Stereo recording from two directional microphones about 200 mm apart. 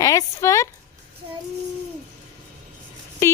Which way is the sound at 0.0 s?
15° left (ahead or behind).